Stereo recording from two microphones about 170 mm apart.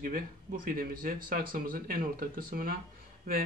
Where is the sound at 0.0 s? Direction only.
55° right (ahead or behind).